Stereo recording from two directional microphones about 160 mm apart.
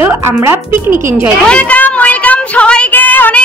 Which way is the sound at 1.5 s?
10° left (ahead or behind).